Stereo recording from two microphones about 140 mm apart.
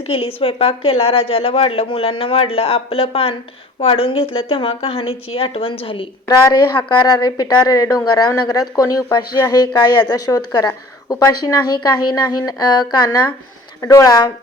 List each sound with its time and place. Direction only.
0.1 s a woman's voice: 40° left (ahead or behind)
6.2 s a woman's voice: 25° left (ahead or behind)